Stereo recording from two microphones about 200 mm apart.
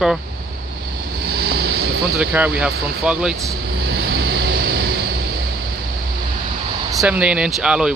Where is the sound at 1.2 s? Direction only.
50° right (ahead or behind).